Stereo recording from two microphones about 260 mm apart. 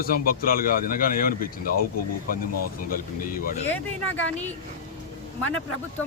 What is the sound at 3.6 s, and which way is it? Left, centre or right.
Speech, centre.